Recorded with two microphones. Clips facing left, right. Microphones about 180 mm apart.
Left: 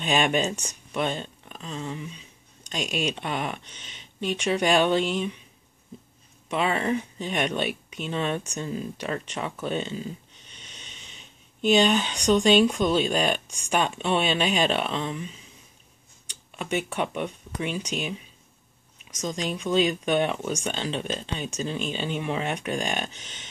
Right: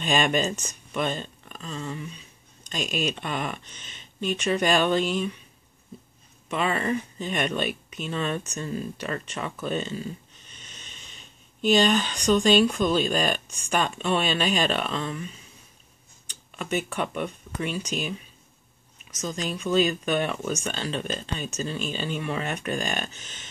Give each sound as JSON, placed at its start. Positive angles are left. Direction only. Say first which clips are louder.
{"t": 0.0, "sound": "speech", "louder": "even", "side_deg": 10}
{"t": 6.5, "sound": "speech", "louder": "left 1 dB", "side_deg": 15}
{"t": 10.6, "sound": "a sound", "louder": "left 1 dB", "side_deg": 15}
{"t": 11.8, "sound": "speech", "louder": "even", "side_deg": 15}
{"t": 16.5, "sound": "speech", "louder": "even", "side_deg": 15}